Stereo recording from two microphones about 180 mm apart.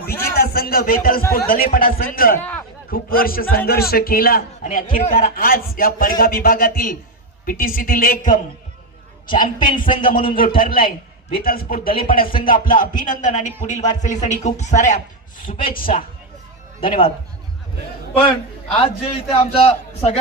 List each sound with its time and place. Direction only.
0.3 s a man's voice: 60° left (ahead or behind)
1.2 s speech: 15° left (ahead or behind)
1.5 s a man's voice: 50° left (ahead or behind)
10.8 s a man's voice: 30° left (ahead or behind)
11.4 s a man's voice: 55° left (ahead or behind)
15.6 s a man's voice: 50° left (ahead or behind)
18.7 s a man's voice: 30° left (ahead or behind)